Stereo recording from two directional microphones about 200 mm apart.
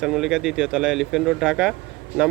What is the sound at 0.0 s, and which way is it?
Speech, centre (ahead or behind).